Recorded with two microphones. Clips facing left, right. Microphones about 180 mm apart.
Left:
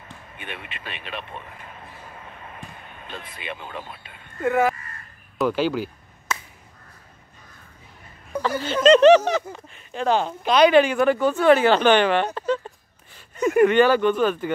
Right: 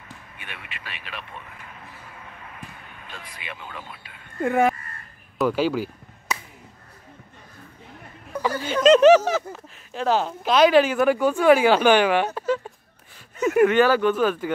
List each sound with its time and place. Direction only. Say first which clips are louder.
0.4 s speech: left 5 dB; 25° left (ahead or behind)
4.4 s speech: even; 30° right (ahead or behind)
5.4 s a sound: even; 5° right (ahead or behind)
8.4 s a sound: left 1 dB; 10° right (ahead or behind)
8.8 s speech: left 1 dB; 5° right (ahead or behind)
13.4 s speech: left 1 dB; 5° right (ahead or behind)